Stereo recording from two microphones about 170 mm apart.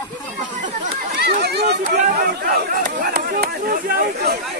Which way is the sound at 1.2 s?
75° right (ahead or behind).